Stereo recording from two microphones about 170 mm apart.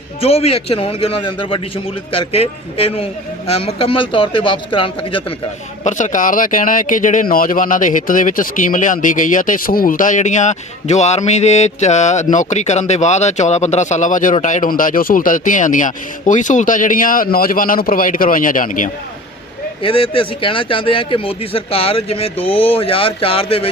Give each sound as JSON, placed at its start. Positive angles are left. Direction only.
{"t": 0.2, "sound": "a man's voice", "side_deg": 35}
{"t": 5.8, "sound": "speech", "side_deg": 50}
{"t": 19.8, "sound": "a man's voice", "side_deg": 30}